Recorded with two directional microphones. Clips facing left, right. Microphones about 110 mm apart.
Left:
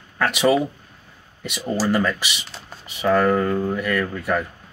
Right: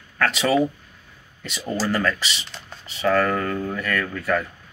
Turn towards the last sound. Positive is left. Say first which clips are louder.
# left 1 dB
turn(degrees=15)  # may be behind; listen again after turning